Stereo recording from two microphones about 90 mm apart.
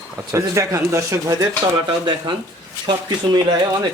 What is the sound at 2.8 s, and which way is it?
Speech, 50° right (ahead or behind).